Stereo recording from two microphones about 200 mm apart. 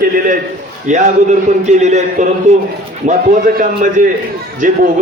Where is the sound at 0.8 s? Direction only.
35° right (ahead or behind).